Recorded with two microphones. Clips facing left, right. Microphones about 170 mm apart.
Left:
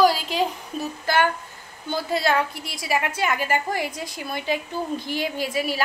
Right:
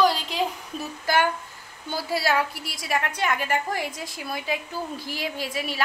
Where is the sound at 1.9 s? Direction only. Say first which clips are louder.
Left 2 dB; 5° right (ahead or behind).